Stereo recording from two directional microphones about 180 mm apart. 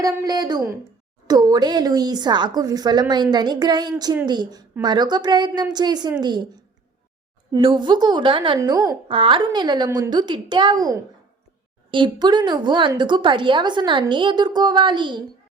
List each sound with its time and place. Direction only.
0.0 s a woman's voice: 20° right (ahead or behind)
7.5 s a woman's voice: 25° right (ahead or behind)